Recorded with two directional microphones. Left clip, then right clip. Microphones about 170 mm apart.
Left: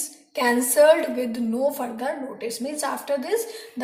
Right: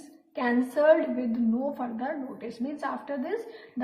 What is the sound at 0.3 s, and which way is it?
A woman's voice, 25° left (ahead or behind).